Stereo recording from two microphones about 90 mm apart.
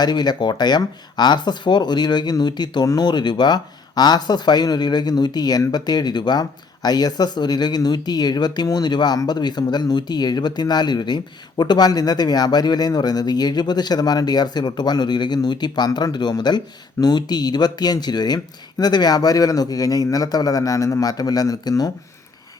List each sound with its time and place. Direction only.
0.0 s speech: 50° left (ahead or behind)